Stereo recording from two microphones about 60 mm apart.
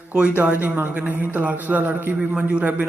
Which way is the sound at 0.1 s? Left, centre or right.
Right.